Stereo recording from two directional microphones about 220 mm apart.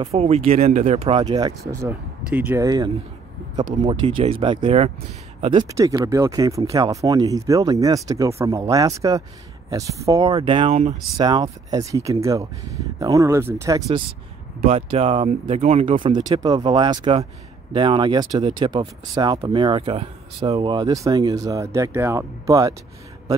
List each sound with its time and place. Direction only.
0.0 s speech: 30° right (ahead or behind)
4.2 s speech: 25° right (ahead or behind)
11.1 s speech: 20° right (ahead or behind)
14.6 s speech: 25° right (ahead or behind)